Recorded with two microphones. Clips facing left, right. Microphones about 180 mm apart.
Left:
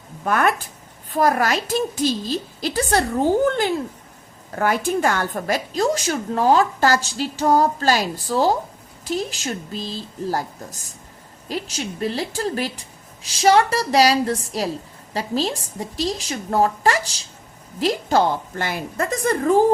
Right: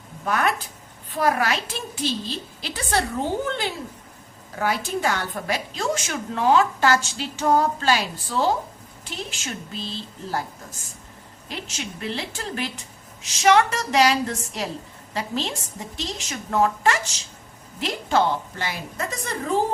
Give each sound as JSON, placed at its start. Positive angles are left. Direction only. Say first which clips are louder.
{"t": 0.3, "sound": "a woman's voice", "louder": "left 4 dB", "side_deg": 50}